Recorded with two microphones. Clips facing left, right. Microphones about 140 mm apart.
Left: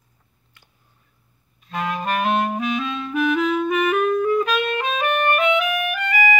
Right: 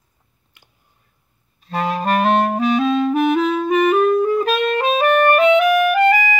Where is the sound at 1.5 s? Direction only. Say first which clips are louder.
Right 4 dB; 35° right (ahead or behind).